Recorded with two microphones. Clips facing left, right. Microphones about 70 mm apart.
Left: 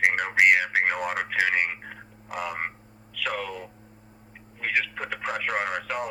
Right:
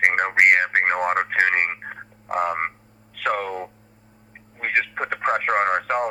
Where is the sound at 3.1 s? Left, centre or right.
Right.